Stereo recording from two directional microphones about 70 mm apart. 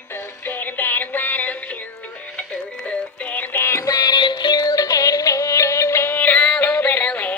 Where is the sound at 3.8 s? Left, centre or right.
Left.